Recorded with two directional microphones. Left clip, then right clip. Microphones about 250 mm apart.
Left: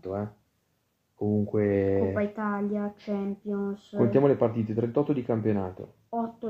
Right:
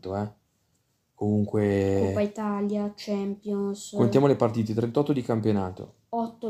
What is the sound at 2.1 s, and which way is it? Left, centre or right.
Speech, centre.